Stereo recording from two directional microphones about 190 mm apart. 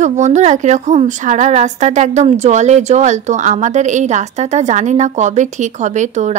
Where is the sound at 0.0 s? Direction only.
40° right (ahead or behind).